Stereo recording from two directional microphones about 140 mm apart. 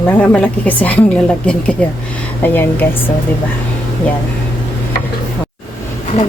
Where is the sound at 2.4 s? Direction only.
15° left (ahead or behind).